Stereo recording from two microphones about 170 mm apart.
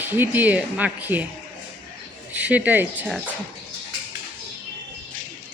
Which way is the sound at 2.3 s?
10° right (ahead or behind).